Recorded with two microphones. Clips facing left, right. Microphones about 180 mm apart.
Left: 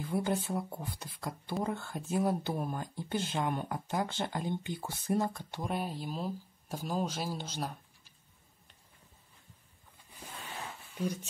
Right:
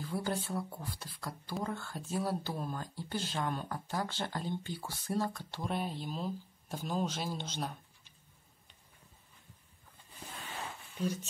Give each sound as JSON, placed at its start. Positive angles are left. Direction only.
{"t": 0.0, "sound": "speech", "side_deg": 20}